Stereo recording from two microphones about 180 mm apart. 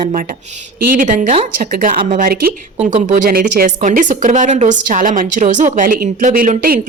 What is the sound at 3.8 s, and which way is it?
A woman's voice, 45° right (ahead or behind).